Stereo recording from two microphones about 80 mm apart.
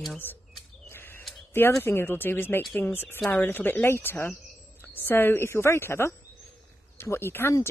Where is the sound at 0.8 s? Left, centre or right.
Left.